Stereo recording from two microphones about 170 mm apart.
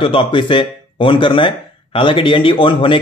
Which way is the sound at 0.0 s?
30° left (ahead or behind).